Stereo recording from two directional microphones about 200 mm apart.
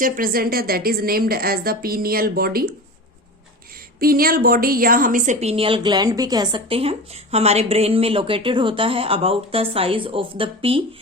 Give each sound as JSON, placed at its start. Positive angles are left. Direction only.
{"t": 0.0, "sound": "speech", "side_deg": -45}
{"t": 4.0, "sound": "a woman's voice", "side_deg": -45}